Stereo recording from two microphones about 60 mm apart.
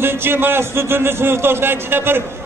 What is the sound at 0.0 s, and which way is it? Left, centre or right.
A man's voice, right.